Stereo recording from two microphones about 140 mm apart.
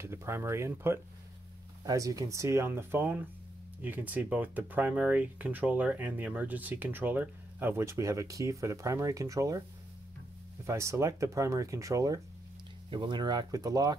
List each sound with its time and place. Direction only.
0.0 s speech: 20° right (ahead or behind)
10.7 s speech: 20° right (ahead or behind)